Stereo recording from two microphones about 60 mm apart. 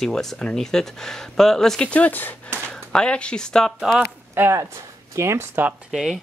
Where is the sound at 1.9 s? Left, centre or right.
Left.